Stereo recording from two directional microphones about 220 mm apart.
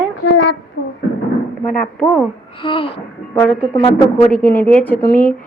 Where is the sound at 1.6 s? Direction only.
5° left (ahead or behind).